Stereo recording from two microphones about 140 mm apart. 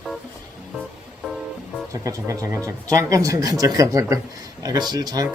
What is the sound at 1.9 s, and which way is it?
Speech, 25° right (ahead or behind).